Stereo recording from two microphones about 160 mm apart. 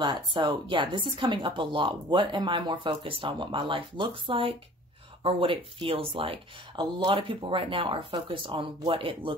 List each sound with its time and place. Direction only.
0.0 s a woman's voice: 30° right (ahead or behind)